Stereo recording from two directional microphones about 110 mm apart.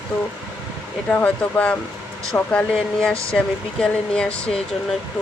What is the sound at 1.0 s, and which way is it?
Speech, 15° left (ahead or behind).